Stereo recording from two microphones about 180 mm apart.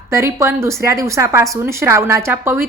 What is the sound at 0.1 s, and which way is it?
A woman's voice, 15° right (ahead or behind).